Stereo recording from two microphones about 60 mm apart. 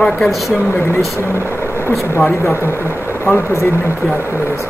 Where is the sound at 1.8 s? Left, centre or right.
Left.